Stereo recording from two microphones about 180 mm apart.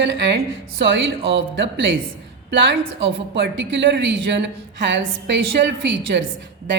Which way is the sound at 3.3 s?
75° right (ahead or behind).